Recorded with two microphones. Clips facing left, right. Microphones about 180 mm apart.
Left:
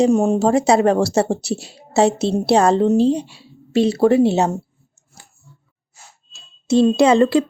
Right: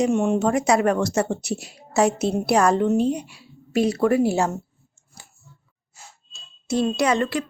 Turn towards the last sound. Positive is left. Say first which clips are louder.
# left 8 dB
turn(degrees=30)  # may be behind; listen again after turning